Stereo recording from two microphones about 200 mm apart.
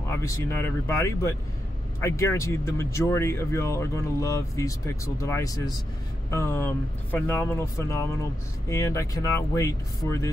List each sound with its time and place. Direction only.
0.1 s speech: 15° left (ahead or behind)